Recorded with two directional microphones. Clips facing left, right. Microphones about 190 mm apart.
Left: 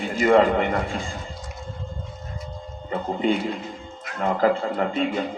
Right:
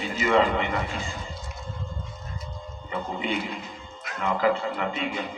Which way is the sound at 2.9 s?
45° left (ahead or behind).